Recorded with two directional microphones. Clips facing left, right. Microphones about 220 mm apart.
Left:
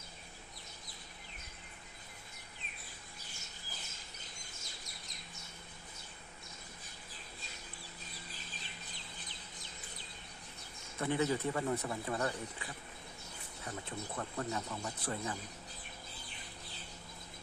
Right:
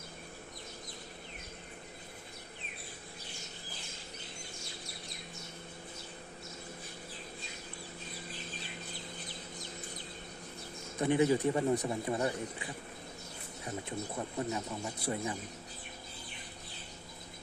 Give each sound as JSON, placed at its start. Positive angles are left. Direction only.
{"t": 11.0, "sound": "speech", "side_deg": -15}
{"t": 14.2, "sound": "speech", "side_deg": -15}